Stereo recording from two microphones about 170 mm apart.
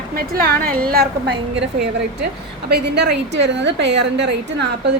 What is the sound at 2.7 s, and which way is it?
A woman's voice, 80° right.